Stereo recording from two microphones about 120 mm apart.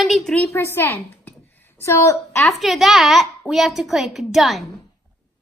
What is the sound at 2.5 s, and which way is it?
A woman's voice, centre (ahead or behind).